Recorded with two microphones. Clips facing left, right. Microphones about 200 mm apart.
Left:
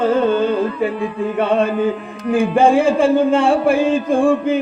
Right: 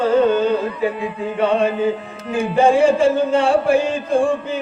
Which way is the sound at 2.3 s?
55° left (ahead or behind).